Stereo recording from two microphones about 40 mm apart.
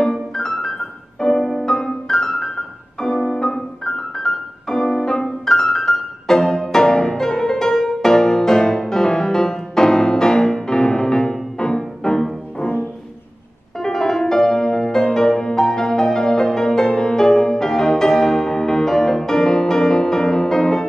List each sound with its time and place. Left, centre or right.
0.0 s music: centre
13.7 s music: centre